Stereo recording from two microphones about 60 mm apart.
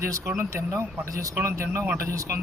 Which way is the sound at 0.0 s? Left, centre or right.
Right.